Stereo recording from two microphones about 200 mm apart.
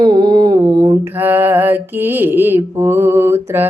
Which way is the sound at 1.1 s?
10° right (ahead or behind).